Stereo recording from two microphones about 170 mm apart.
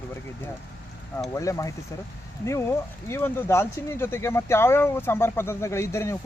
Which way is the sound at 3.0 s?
15° left (ahead or behind).